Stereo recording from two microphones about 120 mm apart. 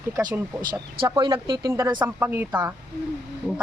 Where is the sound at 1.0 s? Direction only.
40° right (ahead or behind).